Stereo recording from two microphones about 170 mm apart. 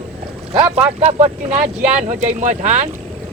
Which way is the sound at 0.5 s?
35° right (ahead or behind).